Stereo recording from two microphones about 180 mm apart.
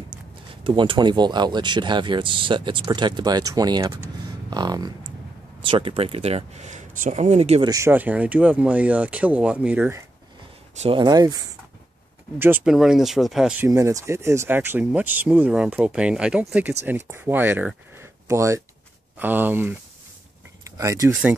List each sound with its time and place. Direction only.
0.7 s speech: 25° right (ahead or behind)
7.6 s speech: 15° right (ahead or behind)
10.8 s speech: 30° right (ahead or behind)
12.4 s speech: 10° right (ahead or behind)
13.7 s speech: 15° right (ahead or behind)